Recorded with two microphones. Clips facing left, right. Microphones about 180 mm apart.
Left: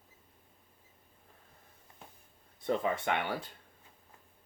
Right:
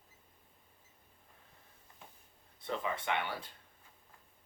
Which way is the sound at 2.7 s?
45° left (ahead or behind).